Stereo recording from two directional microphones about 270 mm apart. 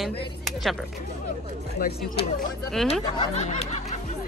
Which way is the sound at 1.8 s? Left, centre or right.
Left.